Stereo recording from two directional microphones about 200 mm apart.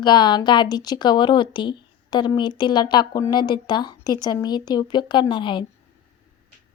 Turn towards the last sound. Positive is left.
turn(degrees=25)  # may be behind; listen again after turning